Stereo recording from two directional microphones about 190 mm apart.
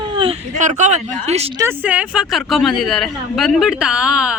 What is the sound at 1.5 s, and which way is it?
Speech, 10° right (ahead or behind).